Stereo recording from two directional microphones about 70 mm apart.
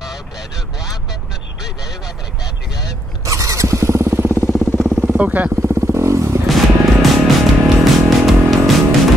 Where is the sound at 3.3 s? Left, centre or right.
Right.